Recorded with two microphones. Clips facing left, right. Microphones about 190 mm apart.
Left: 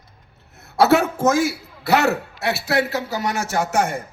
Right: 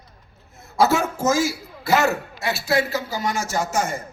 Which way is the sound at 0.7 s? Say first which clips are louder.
Left 3 dB; 65° left (ahead or behind).